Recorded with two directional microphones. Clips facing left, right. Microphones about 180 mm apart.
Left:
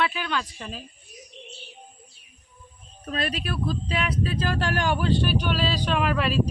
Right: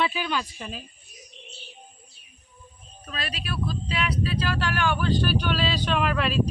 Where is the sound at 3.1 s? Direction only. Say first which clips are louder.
Left 5 dB; 50° left (ahead or behind); by 5.2 s 30° left (ahead or behind).